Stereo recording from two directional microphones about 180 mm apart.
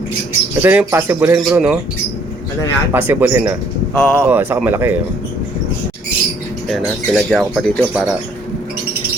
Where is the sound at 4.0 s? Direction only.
5° left (ahead or behind).